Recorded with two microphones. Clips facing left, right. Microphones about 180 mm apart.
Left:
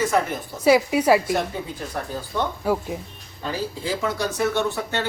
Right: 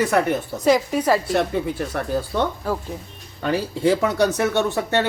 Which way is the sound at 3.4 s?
65° right (ahead or behind).